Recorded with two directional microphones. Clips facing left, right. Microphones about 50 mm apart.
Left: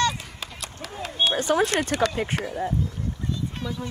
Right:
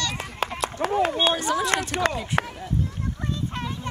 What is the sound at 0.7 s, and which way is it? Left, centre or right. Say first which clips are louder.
Run: right 7 dB; right.